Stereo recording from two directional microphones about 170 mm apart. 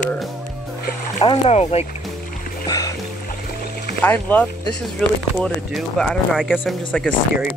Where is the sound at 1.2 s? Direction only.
35° left (ahead or behind).